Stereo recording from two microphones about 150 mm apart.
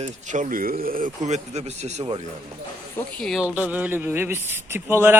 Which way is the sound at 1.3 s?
50° right (ahead or behind).